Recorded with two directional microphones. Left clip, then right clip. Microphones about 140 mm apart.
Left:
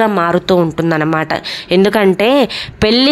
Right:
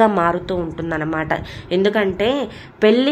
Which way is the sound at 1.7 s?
45° left (ahead or behind).